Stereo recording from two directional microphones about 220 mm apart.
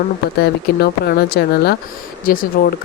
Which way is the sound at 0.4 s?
45° left (ahead or behind).